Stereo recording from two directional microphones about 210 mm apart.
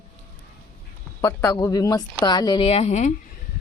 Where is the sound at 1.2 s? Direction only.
15° left (ahead or behind); by 3.1 s 35° left (ahead or behind).